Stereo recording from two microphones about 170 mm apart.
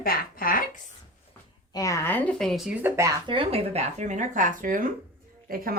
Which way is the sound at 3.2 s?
30° right (ahead or behind).